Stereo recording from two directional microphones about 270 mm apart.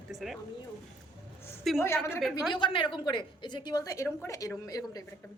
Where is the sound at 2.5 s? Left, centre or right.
Centre.